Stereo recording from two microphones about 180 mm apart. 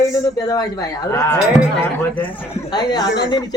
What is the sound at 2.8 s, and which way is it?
Speech, 20° left (ahead or behind).